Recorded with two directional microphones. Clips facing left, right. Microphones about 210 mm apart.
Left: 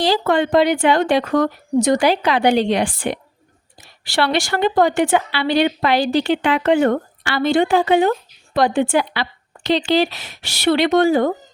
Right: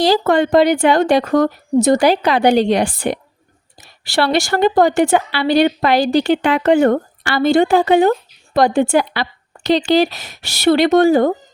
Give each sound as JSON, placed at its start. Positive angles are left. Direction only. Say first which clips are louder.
{"t": 0.0, "sound": "a woman's voice", "louder": "right 3 dB", "side_deg": -40}